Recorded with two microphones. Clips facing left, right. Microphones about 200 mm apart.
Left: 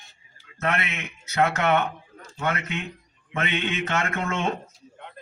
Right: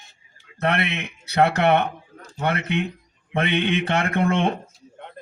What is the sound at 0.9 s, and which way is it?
A man's voice, 35° right (ahead or behind).